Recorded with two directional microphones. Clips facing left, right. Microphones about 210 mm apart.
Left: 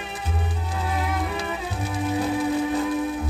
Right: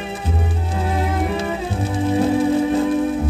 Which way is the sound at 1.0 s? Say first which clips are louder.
Right 7 dB; 30° right (ahead or behind).